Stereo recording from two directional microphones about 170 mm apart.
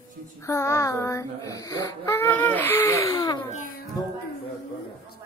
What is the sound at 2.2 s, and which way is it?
Speech, 10° left (ahead or behind).